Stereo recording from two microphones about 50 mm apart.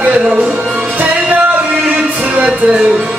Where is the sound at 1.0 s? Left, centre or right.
Right.